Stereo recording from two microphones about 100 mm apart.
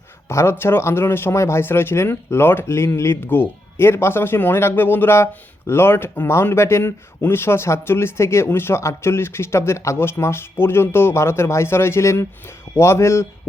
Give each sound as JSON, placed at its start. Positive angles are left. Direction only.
{"t": 0.3, "sound": "speech", "side_deg": 25}